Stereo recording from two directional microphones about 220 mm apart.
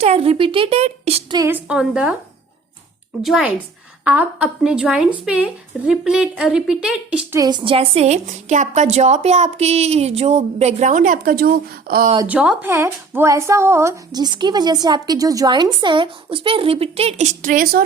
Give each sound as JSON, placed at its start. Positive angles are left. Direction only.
{"t": 0.0, "sound": "a woman's voice", "side_deg": -30}
{"t": 1.4, "sound": "a woman's voice", "side_deg": -10}
{"t": 3.2, "sound": "a woman's voice", "side_deg": -5}
{"t": 12.1, "sound": "a woman's voice", "side_deg": -10}